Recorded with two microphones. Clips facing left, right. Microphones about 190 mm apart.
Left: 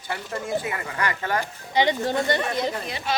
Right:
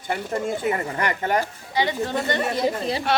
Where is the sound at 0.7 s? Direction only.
35° right (ahead or behind).